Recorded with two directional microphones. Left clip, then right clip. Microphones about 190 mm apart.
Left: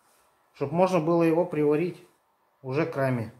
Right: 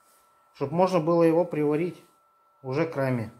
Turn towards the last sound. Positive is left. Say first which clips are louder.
# even
turn(degrees=-35)  # may be behind; listen again after turning